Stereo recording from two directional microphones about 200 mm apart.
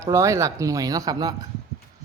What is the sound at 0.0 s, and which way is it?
A man's voice, 15° right (ahead or behind).